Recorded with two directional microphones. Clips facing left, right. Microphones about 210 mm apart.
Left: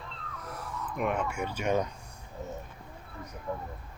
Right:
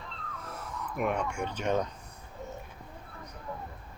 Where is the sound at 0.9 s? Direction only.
Centre (ahead or behind).